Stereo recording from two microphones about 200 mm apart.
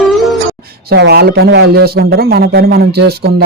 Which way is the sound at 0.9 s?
55° right (ahead or behind).